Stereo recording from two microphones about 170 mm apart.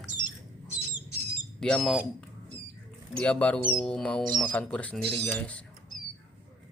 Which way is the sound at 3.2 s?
5° left (ahead or behind).